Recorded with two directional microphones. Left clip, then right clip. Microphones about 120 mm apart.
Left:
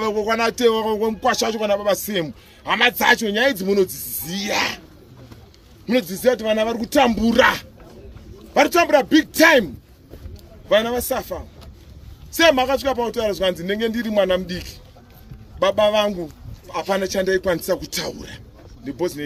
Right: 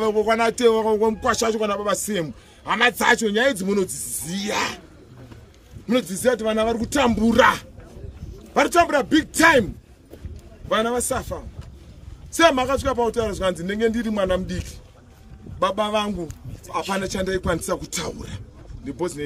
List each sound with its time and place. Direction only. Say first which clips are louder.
0.0 s a man's voice: right 1 dB; 50° right (ahead or behind); by 4.8 s 25° right (ahead or behind)
5.9 s a man's voice: left 2 dB; 25° right (ahead or behind)
10.7 s a man's voice: left 3 dB; 25° right (ahead or behind)